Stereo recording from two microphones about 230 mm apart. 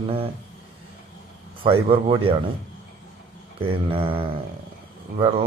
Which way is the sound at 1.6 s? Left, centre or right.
Right.